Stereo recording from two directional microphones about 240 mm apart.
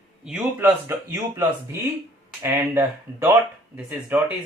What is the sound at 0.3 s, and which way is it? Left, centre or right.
Speech, centre.